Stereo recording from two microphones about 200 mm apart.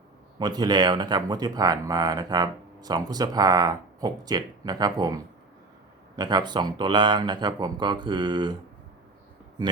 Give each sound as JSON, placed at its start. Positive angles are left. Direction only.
{"t": 0.3, "sound": "speech", "side_deg": -20}